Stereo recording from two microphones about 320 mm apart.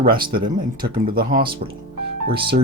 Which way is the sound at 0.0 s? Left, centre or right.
Right.